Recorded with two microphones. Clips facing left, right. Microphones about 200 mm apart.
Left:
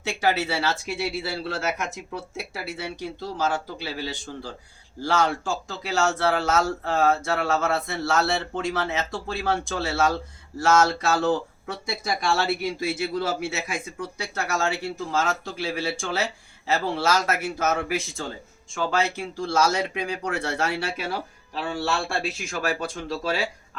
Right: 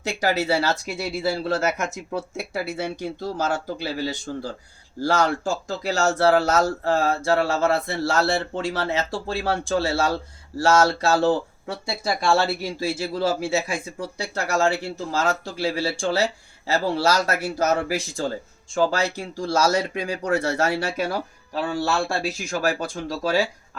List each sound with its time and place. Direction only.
0.0 s speech: 40° right (ahead or behind)